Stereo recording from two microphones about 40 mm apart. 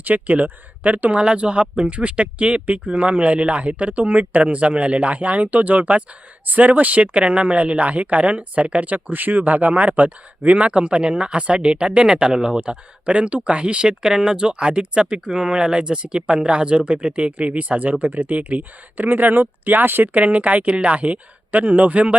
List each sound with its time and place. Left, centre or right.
0.0 s speech: right
19.0 s speech: right
20.1 s speech: right